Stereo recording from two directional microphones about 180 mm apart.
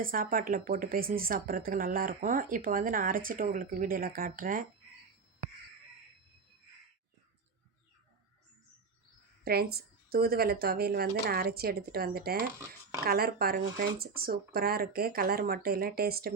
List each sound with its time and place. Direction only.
0.0 s speech: 50° right (ahead or behind)
9.4 s speech: 60° right (ahead or behind)